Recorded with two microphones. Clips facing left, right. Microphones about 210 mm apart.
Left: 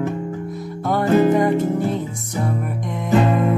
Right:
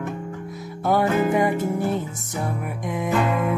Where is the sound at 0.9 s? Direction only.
10° right (ahead or behind).